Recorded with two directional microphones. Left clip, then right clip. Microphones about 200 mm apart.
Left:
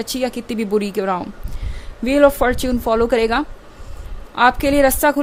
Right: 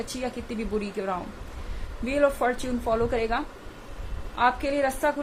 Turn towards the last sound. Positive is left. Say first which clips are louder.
# left 10 dB
turn(degrees=55)  # may be behind; listen again after turning